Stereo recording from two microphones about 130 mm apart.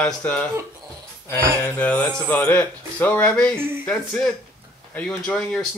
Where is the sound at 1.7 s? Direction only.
10° left (ahead or behind).